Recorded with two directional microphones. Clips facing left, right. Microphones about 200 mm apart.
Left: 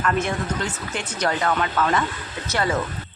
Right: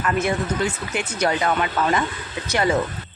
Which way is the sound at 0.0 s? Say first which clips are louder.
Right 1 dB; 10° right (ahead or behind).